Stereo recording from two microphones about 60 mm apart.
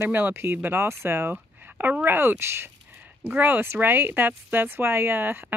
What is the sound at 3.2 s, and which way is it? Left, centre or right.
A woman's voice, right.